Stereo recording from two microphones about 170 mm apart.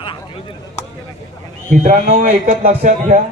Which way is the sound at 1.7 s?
50° right (ahead or behind).